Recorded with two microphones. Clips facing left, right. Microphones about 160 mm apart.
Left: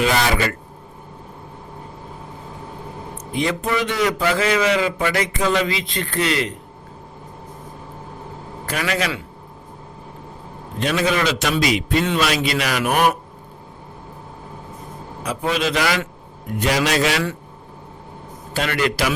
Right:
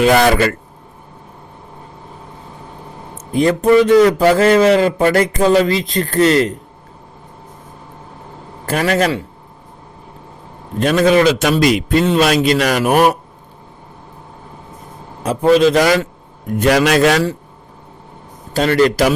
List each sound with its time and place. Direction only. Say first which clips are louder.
0.0 s a man's voice: right 8 dB; 50° right (ahead or behind)
3.3 s a man's voice: right 11 dB; 45° right (ahead or behind)
8.6 s a man's voice: right 8 dB; 40° right (ahead or behind)
10.8 s a man's voice: right 8 dB; 45° right (ahead or behind)
15.2 s a man's voice: right 11 dB; 40° right (ahead or behind)
16.6 s a man's voice: right 7 dB; 55° right (ahead or behind)
18.5 s a man's voice: right 9 dB; 40° right (ahead or behind)